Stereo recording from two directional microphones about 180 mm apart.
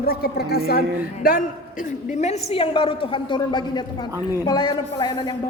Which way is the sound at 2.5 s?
30° left (ahead or behind).